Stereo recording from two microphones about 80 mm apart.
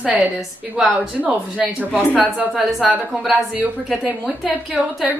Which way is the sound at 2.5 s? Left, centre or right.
Centre.